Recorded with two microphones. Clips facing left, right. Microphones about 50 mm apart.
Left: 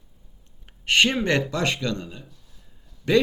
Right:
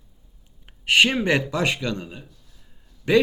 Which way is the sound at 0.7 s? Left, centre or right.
Centre.